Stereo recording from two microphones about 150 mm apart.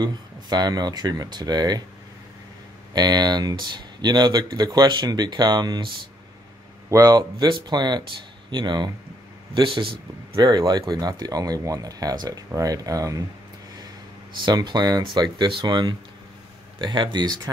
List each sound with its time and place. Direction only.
0.0 s speech: 30° right (ahead or behind)
2.9 s speech: 25° right (ahead or behind)
6.9 s speech: 25° right (ahead or behind)
14.4 s speech: 30° right (ahead or behind)